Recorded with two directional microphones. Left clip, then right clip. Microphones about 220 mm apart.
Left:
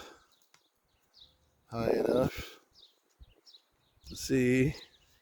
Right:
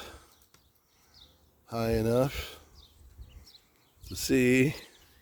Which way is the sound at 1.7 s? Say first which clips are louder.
Even; 35° right (ahead or behind).